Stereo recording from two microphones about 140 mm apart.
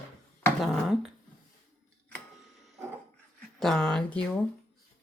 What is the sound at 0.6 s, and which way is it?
Speech, centre (ahead or behind).